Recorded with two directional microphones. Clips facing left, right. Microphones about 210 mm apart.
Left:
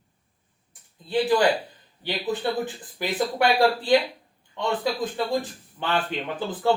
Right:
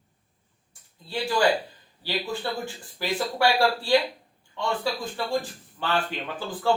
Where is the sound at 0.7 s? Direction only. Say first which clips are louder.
Left 7 dB; 20° left (ahead or behind).